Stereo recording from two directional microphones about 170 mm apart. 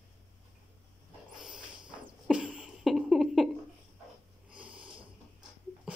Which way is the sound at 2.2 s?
5° right (ahead or behind).